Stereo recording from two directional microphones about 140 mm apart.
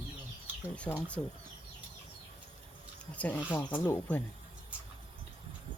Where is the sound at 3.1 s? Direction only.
10° left (ahead or behind).